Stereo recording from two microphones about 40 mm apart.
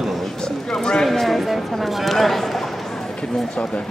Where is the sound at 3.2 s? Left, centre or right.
Left.